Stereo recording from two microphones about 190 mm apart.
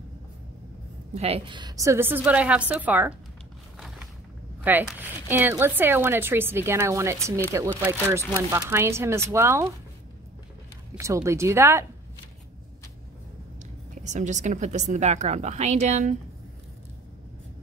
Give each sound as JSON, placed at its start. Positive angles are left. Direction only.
{"t": 1.1, "sound": "speech", "side_deg": -30}
{"t": 4.6, "sound": "speech", "side_deg": -10}
{"t": 11.0, "sound": "speech", "side_deg": -15}
{"t": 14.1, "sound": "a woman's voice", "side_deg": -40}